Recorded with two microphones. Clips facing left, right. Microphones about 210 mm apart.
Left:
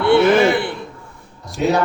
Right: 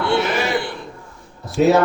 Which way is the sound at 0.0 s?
55° left (ahead or behind).